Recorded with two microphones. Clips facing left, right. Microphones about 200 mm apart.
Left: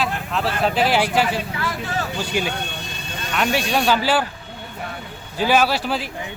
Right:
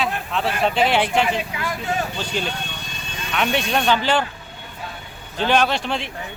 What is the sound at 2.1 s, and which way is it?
Speech, 10° left (ahead or behind).